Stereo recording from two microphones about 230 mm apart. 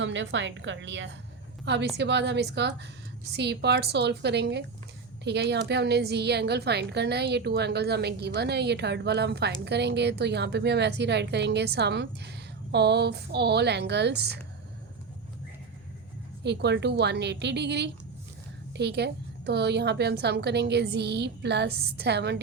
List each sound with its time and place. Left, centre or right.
0.0 s a woman's voice: right
16.4 s a woman's voice: right